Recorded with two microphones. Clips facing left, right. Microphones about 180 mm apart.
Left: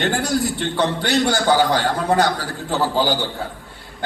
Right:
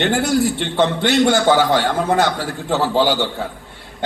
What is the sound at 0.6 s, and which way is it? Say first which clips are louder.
A man's voice: right 3 dB; 25° right (ahead or behind).